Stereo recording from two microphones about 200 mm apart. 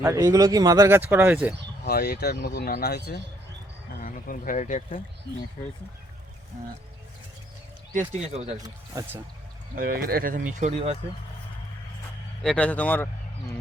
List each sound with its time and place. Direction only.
0.0 s speech: 15° right (ahead or behind)
1.8 s speech: 50° left (ahead or behind)
4.0 s speech: 45° left (ahead or behind)
6.5 s speech: 40° right (ahead or behind)
7.9 s speech: 35° right (ahead or behind)
8.5 s speech: 20° right (ahead or behind)
9.7 s speech: 45° right (ahead or behind)
12.4 s speech: 5° left (ahead or behind)